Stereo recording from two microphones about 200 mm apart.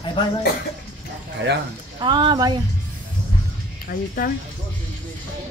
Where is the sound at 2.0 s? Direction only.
20° right (ahead or behind).